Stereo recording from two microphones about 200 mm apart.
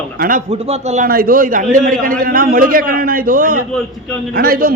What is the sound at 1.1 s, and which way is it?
A man's voice, 45° right (ahead or behind).